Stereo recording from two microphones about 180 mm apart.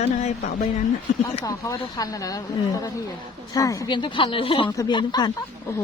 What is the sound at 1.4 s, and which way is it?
Speech, 20° left (ahead or behind).